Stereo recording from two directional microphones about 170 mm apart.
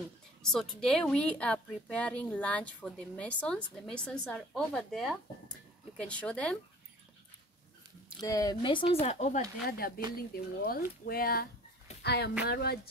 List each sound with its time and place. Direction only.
0.4 s a woman's voice: 5° left (ahead or behind)
8.2 s speech: 20° left (ahead or behind); by 9.5 s 40° left (ahead or behind)
9.7 s speech: 65° left (ahead or behind)
12.0 s a woman's voice: 75° left (ahead or behind)